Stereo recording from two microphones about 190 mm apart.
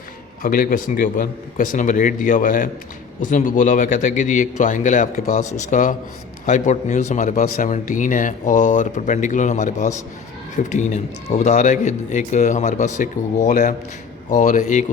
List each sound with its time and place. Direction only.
0.4 s a man's voice: 45° left (ahead or behind)